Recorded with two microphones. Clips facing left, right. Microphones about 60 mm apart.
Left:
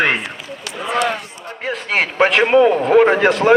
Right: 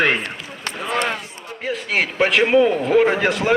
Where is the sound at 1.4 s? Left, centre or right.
Left.